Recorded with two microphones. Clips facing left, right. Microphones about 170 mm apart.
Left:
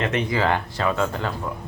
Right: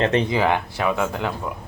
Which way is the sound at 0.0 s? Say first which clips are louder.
Right 4 dB; 30° right (ahead or behind).